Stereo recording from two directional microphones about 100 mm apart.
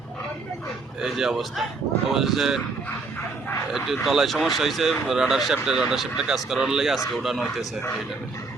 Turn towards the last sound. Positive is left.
turn(degrees=0)  # may be behind; listen again after turning